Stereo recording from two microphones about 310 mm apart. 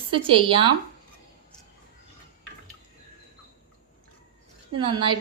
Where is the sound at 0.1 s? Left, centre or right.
Centre.